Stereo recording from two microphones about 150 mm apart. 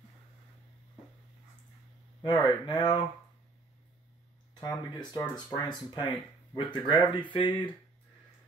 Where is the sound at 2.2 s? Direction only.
30° left (ahead or behind).